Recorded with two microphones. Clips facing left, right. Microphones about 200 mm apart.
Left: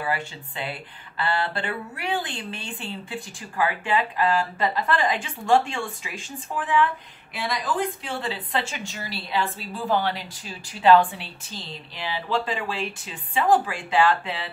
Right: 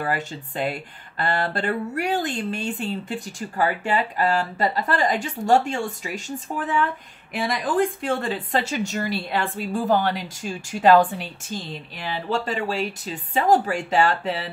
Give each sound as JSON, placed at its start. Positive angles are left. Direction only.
{"t": 0.0, "sound": "speech", "side_deg": -45}